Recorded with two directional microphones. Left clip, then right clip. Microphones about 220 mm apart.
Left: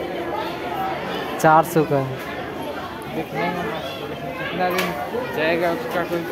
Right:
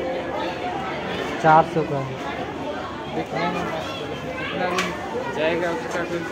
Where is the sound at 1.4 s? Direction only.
55° left (ahead or behind).